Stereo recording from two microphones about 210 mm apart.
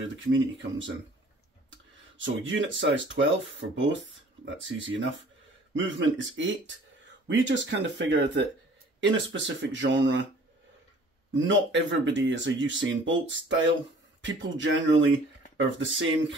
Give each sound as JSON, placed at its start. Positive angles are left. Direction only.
{"t": 0.0, "sound": "speech", "side_deg": -60}
{"t": 11.3, "sound": "speech", "side_deg": -60}